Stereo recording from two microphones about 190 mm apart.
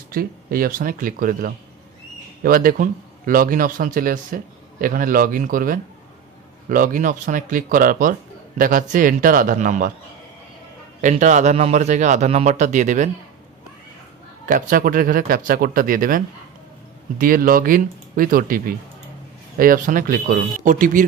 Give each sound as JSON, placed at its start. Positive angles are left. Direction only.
{"t": 0.1, "sound": "a man's voice", "side_deg": -50}
{"t": 11.0, "sound": "a man's voice", "side_deg": -40}
{"t": 14.4, "sound": "a man's voice", "side_deg": -45}